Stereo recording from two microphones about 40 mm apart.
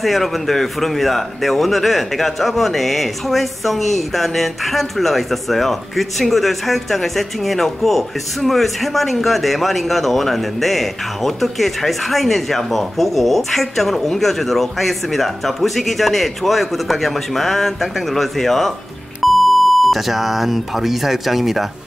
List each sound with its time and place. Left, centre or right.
0.0 s a man's voice: centre